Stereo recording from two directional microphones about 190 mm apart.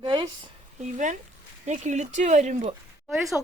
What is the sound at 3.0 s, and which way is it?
Speech, centre (ahead or behind).